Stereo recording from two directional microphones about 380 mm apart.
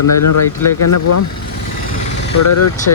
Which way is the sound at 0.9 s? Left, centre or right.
Left.